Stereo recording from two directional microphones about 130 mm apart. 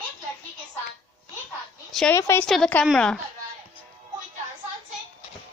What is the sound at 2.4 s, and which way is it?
Speech, 5° left (ahead or behind).